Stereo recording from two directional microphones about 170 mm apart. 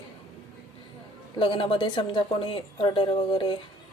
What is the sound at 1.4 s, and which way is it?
A woman's voice, 30° left (ahead or behind).